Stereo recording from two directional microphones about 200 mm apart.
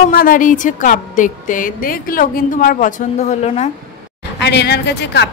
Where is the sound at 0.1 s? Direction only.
45° left (ahead or behind).